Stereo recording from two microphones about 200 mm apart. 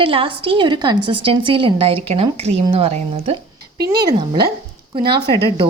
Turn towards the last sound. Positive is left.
turn(degrees=-20)  # may be behind; listen again after turning